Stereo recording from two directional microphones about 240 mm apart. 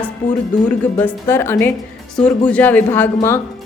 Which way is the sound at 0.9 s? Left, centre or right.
Centre.